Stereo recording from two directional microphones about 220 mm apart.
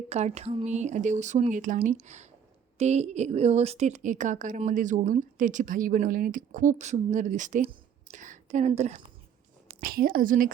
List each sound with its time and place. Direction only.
0.1 s a woman's voice: 30° right (ahead or behind)
9.8 s a woman's voice: 40° right (ahead or behind)